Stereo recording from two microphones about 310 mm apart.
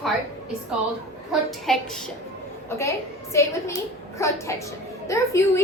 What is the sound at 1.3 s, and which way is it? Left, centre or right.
A woman's voice, centre.